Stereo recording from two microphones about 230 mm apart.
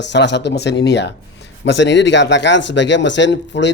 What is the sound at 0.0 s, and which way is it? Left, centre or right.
Speech, left.